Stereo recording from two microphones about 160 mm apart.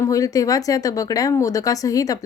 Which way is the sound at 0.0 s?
20° left (ahead or behind).